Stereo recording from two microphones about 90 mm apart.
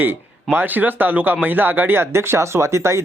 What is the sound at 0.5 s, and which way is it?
Speech, 20° right (ahead or behind).